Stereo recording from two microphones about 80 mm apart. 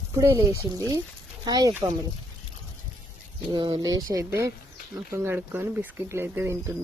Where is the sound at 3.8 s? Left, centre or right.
Right.